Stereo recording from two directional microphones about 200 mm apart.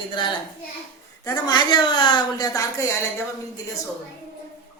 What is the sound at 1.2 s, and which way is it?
A woman's voice, 20° left (ahead or behind).